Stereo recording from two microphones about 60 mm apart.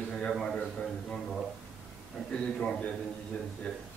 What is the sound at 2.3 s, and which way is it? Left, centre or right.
Speech, centre.